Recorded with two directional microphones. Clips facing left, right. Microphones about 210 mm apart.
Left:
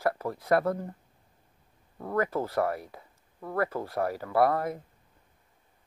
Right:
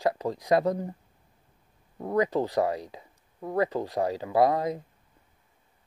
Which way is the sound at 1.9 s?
15° right (ahead or behind).